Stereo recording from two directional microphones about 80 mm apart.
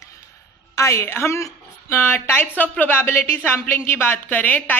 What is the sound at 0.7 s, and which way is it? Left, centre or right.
A woman's voice, left.